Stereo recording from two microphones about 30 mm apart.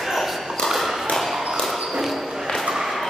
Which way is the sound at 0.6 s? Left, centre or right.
Centre.